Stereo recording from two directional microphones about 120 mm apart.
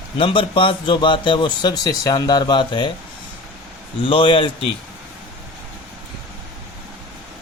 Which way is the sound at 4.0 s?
45° left (ahead or behind).